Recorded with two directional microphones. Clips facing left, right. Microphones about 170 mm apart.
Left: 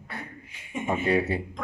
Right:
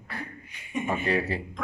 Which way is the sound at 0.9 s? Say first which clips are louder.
Left 3 dB; 20° left (ahead or behind).